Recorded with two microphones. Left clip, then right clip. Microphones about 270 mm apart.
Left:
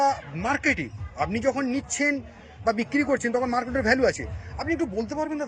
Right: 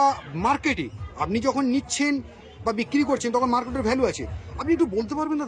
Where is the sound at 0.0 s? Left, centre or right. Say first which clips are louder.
Right 2 dB; centre.